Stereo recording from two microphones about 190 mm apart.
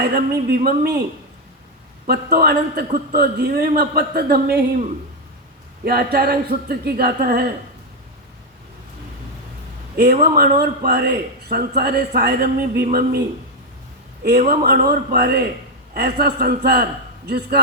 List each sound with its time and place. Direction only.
0.0 s speech: 55° right (ahead or behind)
2.0 s a man's voice: 55° right (ahead or behind)
10.2 s a man's voice: 50° right (ahead or behind)
14.3 s a man's voice: 50° right (ahead or behind)